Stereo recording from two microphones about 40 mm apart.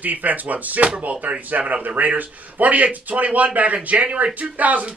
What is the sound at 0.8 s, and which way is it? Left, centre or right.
Speech, right.